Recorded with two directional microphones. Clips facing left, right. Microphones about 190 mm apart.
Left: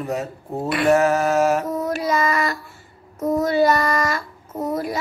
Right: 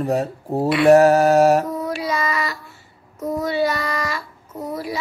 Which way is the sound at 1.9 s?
45° left (ahead or behind).